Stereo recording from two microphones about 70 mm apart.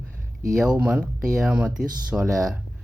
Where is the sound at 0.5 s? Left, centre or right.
Centre.